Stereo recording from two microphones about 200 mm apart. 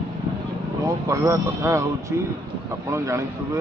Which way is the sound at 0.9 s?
15° right (ahead or behind).